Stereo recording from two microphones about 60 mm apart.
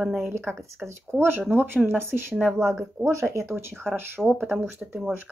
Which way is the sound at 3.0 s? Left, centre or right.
Centre.